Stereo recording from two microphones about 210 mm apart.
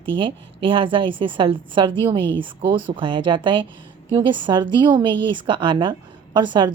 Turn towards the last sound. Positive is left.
turn(degrees=-20)  # may be behind; listen again after turning